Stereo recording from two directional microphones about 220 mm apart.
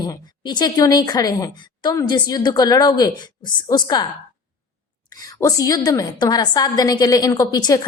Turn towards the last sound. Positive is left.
turn(degrees=15)  # may be behind; listen again after turning